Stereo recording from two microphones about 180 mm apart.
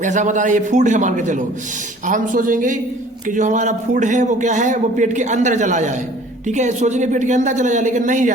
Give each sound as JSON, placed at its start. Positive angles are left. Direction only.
{"t": 0.0, "sound": "a man's voice", "side_deg": -45}